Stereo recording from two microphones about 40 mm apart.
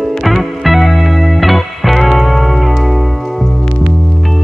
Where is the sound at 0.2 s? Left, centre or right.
Centre.